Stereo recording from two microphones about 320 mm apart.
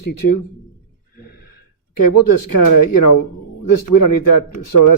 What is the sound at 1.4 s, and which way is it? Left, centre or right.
Speech, left.